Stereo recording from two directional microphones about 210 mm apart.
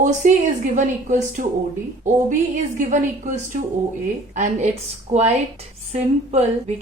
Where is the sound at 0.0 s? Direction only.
35° right (ahead or behind).